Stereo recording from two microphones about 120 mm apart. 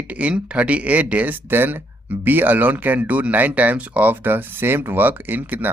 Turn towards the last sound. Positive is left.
turn(degrees=-15)  # may be behind; listen again after turning